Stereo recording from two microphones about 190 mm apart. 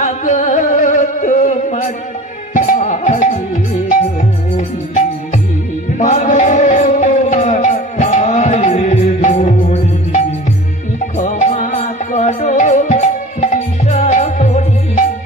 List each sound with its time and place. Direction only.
0.0 s music: 40° left (ahead or behind)